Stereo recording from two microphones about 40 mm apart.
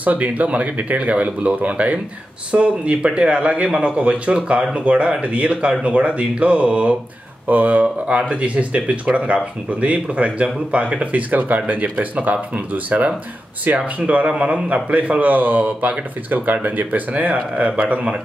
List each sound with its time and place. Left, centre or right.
0.0 s speech: right
7.4 s speech: right